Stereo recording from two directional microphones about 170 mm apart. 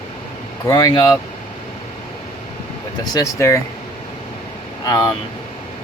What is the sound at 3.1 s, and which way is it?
Speech, 20° left (ahead or behind).